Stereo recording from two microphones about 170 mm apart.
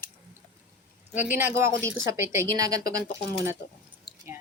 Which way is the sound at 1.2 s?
10° right (ahead or behind).